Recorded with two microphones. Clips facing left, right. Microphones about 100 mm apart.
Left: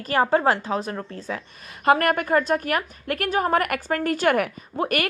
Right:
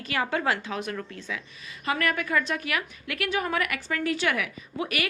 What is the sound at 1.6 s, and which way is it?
A woman's voice, 55° left (ahead or behind).